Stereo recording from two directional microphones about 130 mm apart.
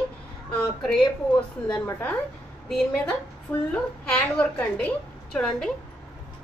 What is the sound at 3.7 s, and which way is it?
A woman's voice, 10° left (ahead or behind).